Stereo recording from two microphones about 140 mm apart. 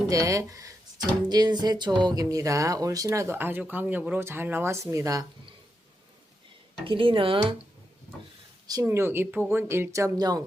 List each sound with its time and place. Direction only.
0.1 s speech: 25° right (ahead or behind)
6.8 s speech: 40° right (ahead or behind)
8.6 s speech: 20° right (ahead or behind)